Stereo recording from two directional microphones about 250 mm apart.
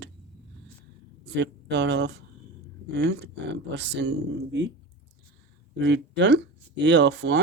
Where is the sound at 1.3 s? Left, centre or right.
Right.